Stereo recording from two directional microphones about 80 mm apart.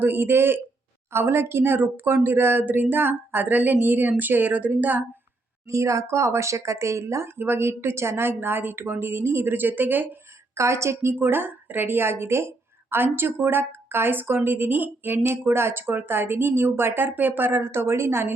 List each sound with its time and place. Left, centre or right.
0.0 s a woman's voice: right
5.6 s speech: right
10.5 s a woman's voice: right